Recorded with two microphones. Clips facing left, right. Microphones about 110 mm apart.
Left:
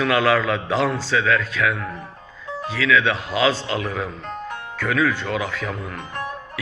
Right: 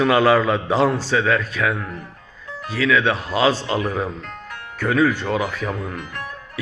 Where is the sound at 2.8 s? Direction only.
40° right (ahead or behind).